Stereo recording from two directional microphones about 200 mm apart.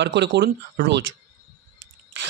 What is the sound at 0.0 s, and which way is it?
Speech, 60° right (ahead or behind).